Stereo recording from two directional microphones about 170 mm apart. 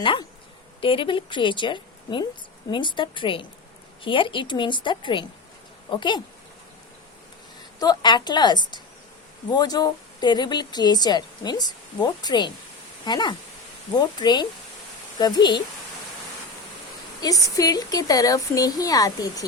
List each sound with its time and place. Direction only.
0.0 s a woman's voice: 30° left (ahead or behind)
7.8 s a woman's voice: 25° left (ahead or behind)
17.2 s a woman's voice: 20° left (ahead or behind)